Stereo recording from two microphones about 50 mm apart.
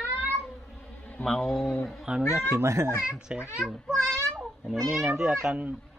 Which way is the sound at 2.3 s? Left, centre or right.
Right.